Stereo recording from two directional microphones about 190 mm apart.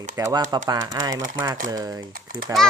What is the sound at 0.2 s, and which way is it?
Speech, 20° right (ahead or behind).